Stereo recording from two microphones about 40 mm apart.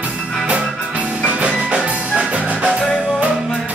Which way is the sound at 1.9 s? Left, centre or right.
Right.